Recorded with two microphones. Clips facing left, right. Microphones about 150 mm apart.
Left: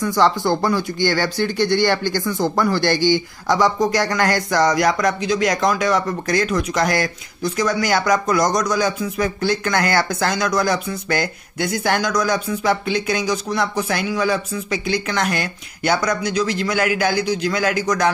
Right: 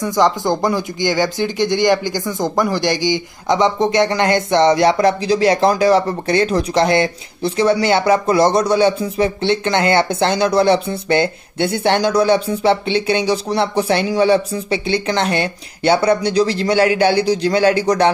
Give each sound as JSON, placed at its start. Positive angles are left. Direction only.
{"t": 0.0, "sound": "speech", "side_deg": -20}